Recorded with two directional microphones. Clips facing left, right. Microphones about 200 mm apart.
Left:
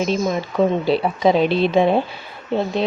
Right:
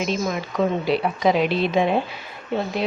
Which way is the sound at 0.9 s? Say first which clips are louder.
Left 3 dB; 30° left (ahead or behind).